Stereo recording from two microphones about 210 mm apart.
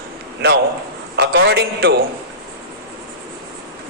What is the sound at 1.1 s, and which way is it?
Speech, 50° right (ahead or behind).